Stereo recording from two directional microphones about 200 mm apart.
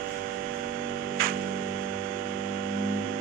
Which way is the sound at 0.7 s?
45° right (ahead or behind).